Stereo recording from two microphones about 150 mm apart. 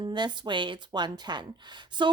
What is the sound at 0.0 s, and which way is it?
Speech, 30° right (ahead or behind).